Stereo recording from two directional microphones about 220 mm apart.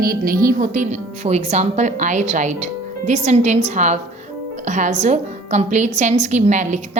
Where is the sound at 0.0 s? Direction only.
40° right (ahead or behind).